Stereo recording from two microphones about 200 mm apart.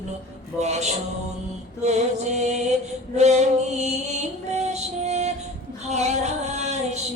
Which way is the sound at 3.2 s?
35° right (ahead or behind).